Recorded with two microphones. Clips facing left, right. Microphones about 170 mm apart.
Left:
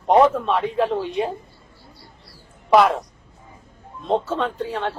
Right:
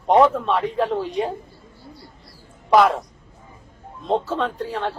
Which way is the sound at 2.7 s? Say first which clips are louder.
Even; centre (ahead or behind).